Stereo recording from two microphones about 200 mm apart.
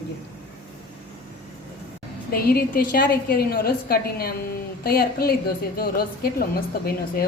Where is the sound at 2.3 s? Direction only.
50° left (ahead or behind).